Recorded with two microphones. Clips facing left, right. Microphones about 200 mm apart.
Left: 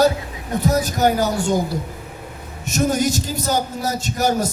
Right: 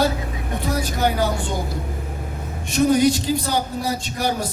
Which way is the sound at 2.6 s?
45° left (ahead or behind).